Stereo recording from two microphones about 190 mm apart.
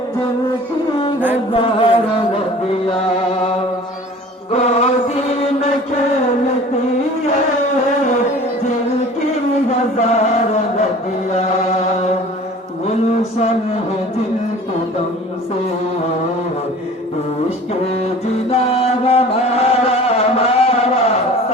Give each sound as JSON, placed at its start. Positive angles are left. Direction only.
{"t": 1.5, "sound": "chant", "side_deg": 30}
{"t": 4.5, "sound": "chant", "side_deg": 35}
{"t": 10.0, "sound": "chant", "side_deg": 35}
{"t": 11.3, "sound": "chant", "side_deg": 35}
{"t": 18.5, "sound": "music", "side_deg": 30}